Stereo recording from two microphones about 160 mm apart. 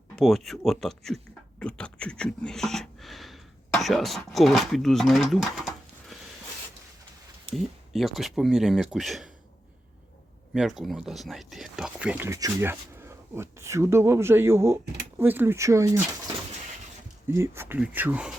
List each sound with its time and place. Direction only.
0.2 s speech: centre (ahead or behind)
7.9 s speech: centre (ahead or behind)
10.5 s speech: centre (ahead or behind)